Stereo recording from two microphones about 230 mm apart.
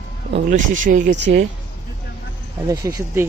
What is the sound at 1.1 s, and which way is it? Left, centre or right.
Speech, right.